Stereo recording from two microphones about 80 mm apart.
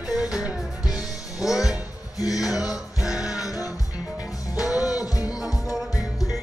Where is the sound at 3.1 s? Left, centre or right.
Centre.